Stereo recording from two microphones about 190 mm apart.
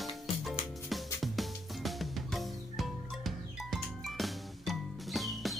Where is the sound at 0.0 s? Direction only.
Centre (ahead or behind).